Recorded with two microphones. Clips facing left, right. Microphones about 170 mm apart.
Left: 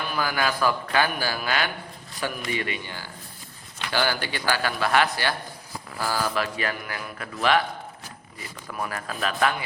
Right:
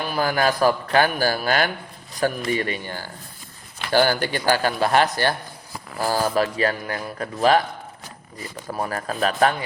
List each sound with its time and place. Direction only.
0.1 s a man's voice: 40° right (ahead or behind)